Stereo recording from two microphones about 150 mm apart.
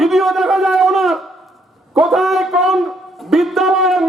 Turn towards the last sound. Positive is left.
turn(degrees=0)  # may be behind; listen again after turning